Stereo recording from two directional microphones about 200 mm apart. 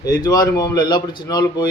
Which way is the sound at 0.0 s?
20° left (ahead or behind).